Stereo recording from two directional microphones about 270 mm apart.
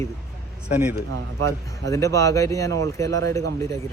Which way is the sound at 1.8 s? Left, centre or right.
Centre.